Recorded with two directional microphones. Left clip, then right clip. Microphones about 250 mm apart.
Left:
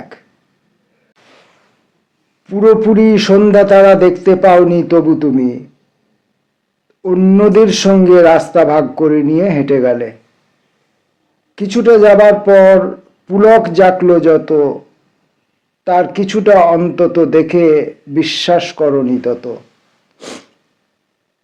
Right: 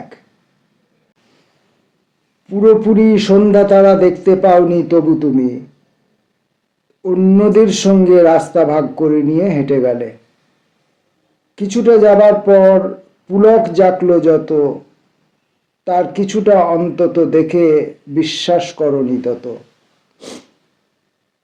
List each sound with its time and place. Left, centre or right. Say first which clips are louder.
2.5 s a sound: left 2 dB; centre
2.8 s a man's voice: left 2 dB; centre
7.0 s a man's voice: left 2 dB; centre
11.5 s a man's voice: left 2 dB; centre
12.1 s a man's voice: left 2 dB; left
15.8 s a man's voice: left 3 dB; centre
20.1 s sniff: left 3 dB; centre